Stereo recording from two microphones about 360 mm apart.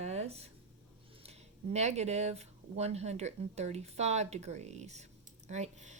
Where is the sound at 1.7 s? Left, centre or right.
Centre.